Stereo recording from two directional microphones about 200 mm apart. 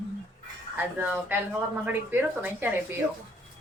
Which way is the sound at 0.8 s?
10° right (ahead or behind).